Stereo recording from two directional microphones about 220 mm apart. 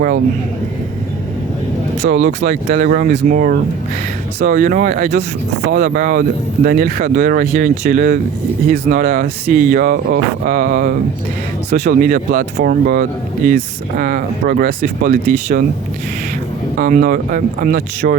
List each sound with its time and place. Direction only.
2.0 s speech: 30° right (ahead or behind)
16.7 s speech: 40° right (ahead or behind)